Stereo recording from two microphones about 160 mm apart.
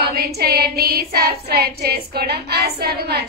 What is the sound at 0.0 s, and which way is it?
Child singing, 80° right.